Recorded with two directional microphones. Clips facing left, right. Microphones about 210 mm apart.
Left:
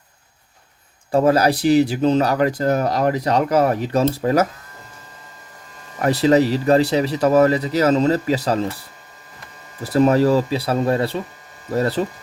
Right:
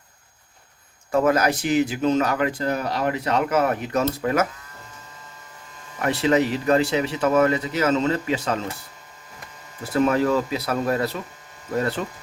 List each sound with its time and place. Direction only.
1.1 s speech: 35° left (ahead or behind)
6.0 s speech: 40° left (ahead or behind)
9.8 s speech: 35° left (ahead or behind)